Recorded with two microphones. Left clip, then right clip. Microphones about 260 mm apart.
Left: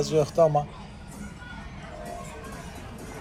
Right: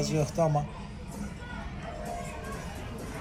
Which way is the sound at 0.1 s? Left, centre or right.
Left.